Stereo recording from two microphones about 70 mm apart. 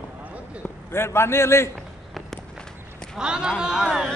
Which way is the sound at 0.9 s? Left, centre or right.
Left.